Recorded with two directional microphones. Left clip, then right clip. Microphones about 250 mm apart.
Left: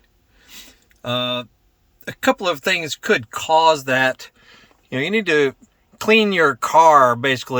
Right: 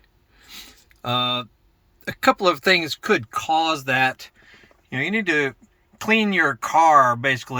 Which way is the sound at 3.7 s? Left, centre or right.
Centre.